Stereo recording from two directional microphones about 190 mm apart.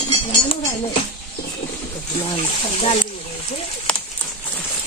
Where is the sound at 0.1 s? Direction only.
30° left (ahead or behind).